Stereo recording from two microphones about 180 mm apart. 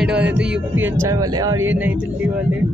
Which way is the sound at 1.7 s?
10° right (ahead or behind).